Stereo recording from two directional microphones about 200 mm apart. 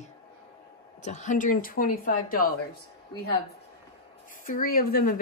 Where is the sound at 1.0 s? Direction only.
35° left (ahead or behind).